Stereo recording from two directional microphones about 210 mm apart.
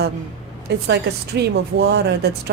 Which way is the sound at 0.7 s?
50° right (ahead or behind).